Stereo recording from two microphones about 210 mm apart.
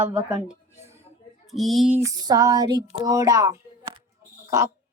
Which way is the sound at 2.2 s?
15° right (ahead or behind).